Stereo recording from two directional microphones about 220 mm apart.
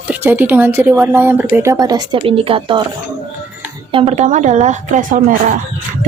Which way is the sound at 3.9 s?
25° right (ahead or behind).